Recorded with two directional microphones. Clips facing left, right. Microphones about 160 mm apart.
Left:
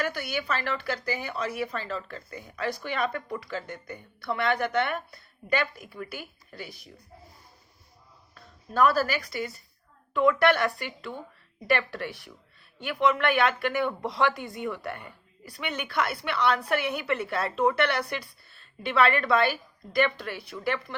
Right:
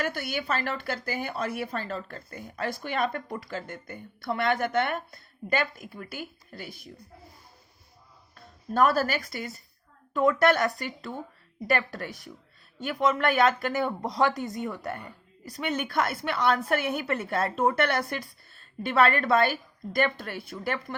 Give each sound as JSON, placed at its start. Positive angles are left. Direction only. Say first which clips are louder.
{"t": 0.0, "sound": "speech", "louder": "even", "side_deg": -45}
{"t": 8.7, "sound": "speech", "louder": "even", "side_deg": -50}